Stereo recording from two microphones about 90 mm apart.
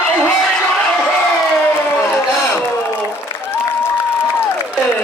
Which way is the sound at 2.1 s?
25° left (ahead or behind).